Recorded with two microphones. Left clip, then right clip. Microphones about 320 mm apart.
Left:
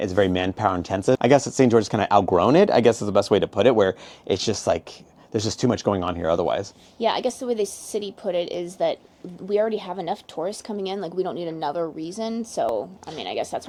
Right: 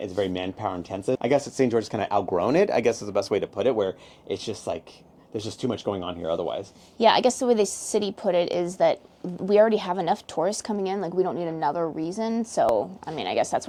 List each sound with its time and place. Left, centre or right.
0.0 s speech: left
7.0 s a woman's voice: right
10.8 s speech: centre